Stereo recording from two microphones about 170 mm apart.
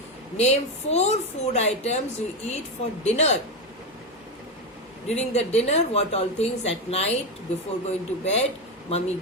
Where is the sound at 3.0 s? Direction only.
40° left (ahead or behind).